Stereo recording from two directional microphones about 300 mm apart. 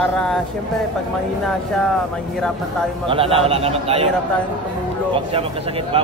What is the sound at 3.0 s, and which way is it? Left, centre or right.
Speech, centre.